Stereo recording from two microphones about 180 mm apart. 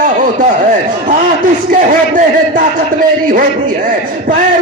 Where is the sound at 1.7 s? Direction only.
50° right (ahead or behind).